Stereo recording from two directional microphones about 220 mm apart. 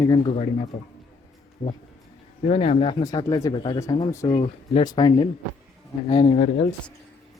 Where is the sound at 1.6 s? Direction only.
40° left (ahead or behind).